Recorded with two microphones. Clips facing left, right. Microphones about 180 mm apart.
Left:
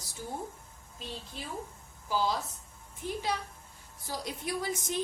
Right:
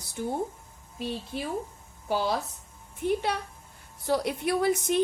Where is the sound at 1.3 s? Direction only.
65° right (ahead or behind).